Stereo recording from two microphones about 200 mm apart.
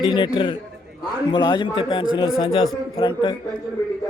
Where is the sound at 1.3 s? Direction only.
20° left (ahead or behind).